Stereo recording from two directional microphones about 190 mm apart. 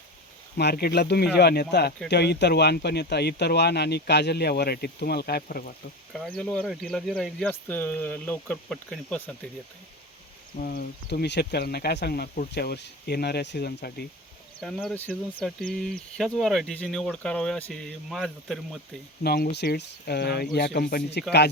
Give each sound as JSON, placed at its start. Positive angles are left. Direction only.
{"t": 0.5, "sound": "speech", "side_deg": 55}
{"t": 6.1, "sound": "speech", "side_deg": 5}
{"t": 10.6, "sound": "speech", "side_deg": 55}
{"t": 14.6, "sound": "speech", "side_deg": 0}
{"t": 19.2, "sound": "speech", "side_deg": 55}